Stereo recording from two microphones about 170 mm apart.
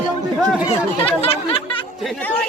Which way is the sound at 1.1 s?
35° left (ahead or behind).